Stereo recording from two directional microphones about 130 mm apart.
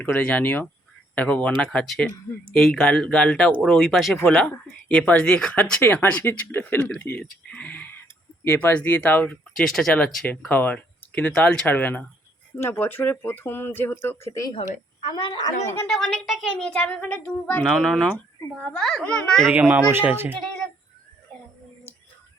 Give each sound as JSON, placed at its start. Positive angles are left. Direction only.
{"t": 0.0, "sound": "speech", "side_deg": 10}
{"t": 15.1, "sound": "a woman's voice", "side_deg": 35}
{"t": 15.9, "sound": "speech", "side_deg": 0}
{"t": 17.6, "sound": "speech", "side_deg": 0}
{"t": 19.5, "sound": "speech", "side_deg": -10}